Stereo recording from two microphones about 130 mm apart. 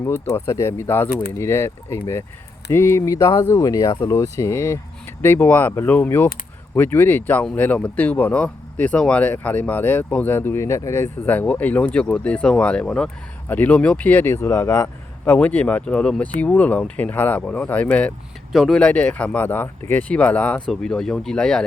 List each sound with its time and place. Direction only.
0.0 s speech: 20° left (ahead or behind)
15.2 s speech: 10° left (ahead or behind)